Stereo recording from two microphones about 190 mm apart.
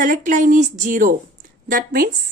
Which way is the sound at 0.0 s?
45° right (ahead or behind).